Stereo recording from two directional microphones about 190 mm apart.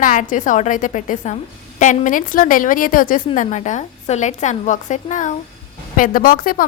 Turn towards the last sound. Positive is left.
turn(degrees=50)  # may be behind; listen again after turning